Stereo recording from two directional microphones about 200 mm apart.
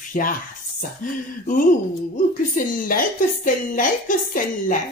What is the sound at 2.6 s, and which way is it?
A woman's voice, 45° left (ahead or behind).